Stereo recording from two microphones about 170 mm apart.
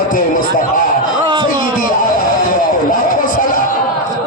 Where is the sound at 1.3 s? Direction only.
25° right (ahead or behind).